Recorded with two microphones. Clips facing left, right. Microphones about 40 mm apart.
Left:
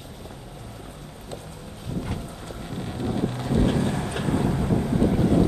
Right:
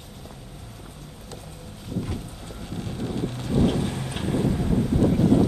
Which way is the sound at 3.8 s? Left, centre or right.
Left.